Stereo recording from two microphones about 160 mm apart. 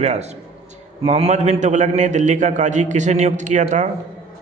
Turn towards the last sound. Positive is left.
turn(degrees=-50)  # may be behind; listen again after turning